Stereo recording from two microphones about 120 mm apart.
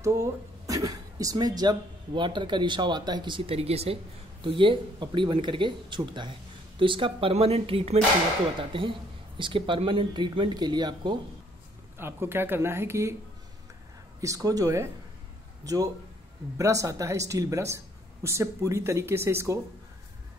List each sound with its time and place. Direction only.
0.0 s speech: 25° right (ahead or behind)
12.0 s speech: 20° right (ahead or behind)
14.2 s speech: 30° right (ahead or behind)